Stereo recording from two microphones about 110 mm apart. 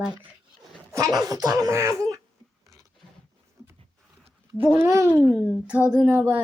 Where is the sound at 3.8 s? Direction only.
65° right (ahead or behind).